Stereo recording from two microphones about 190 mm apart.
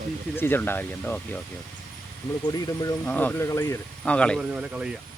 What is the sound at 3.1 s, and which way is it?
Speech, 10° left (ahead or behind).